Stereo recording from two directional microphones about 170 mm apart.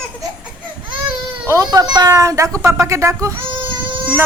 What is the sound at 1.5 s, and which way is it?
A woman's voice, 20° right (ahead or behind).